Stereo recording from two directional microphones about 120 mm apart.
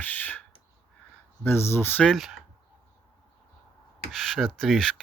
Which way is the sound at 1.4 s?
20° left (ahead or behind).